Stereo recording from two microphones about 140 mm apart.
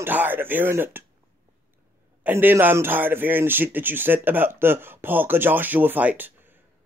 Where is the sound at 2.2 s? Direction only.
15° right (ahead or behind).